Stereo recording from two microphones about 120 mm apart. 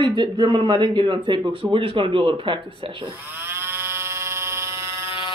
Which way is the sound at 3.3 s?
20° right (ahead or behind).